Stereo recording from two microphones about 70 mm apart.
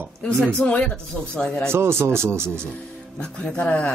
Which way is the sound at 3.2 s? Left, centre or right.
Centre.